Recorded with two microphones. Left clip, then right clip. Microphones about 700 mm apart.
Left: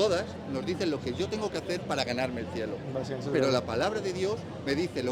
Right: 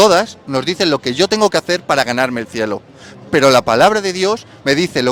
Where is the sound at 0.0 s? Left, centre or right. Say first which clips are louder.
Right 17 dB; right.